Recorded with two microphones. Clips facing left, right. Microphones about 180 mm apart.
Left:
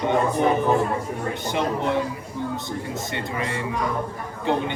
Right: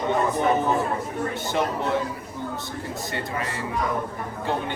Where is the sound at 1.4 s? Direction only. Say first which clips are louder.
Left 3 dB; 15° left (ahead or behind).